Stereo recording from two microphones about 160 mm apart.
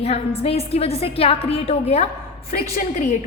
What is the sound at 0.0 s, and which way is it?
A woman's voice, 40° left (ahead or behind).